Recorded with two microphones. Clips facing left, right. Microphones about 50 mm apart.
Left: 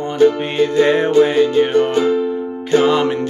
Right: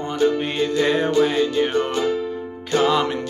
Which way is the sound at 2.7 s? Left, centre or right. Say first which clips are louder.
Left 5 dB; centre.